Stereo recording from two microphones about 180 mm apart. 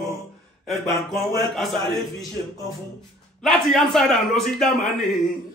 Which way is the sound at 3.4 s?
Centre (ahead or behind).